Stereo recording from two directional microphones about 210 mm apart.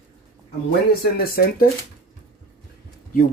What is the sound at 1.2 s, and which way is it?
Speech, 45° left (ahead or behind).